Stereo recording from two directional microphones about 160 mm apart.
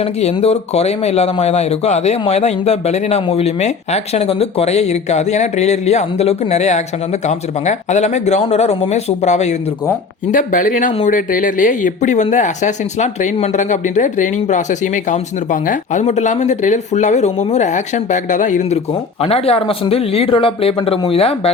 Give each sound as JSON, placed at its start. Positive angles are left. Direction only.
{"t": 0.0, "sound": "speech", "side_deg": 40}
{"t": 19.2, "sound": "speech", "side_deg": 40}